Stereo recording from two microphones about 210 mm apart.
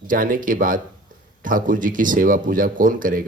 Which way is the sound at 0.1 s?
40° right (ahead or behind).